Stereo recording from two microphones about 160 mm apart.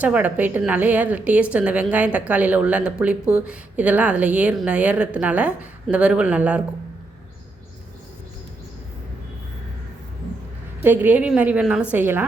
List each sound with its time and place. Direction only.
0.0 s a woman's voice: 10° right (ahead or behind)
10.8 s a woman's voice: 10° right (ahead or behind)